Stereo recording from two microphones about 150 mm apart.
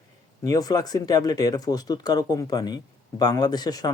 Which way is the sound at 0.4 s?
25° left (ahead or behind).